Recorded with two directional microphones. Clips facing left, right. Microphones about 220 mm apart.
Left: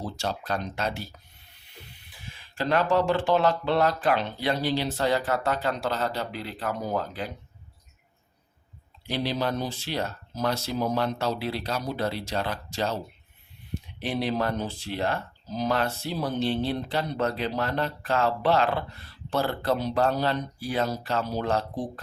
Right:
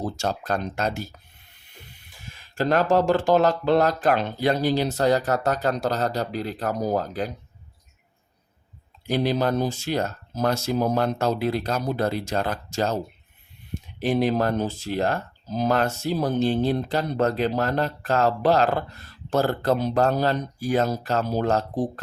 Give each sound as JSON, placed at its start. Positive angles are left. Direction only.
{"t": 0.0, "sound": "speech", "side_deg": -45}
{"t": 9.0, "sound": "speech", "side_deg": -50}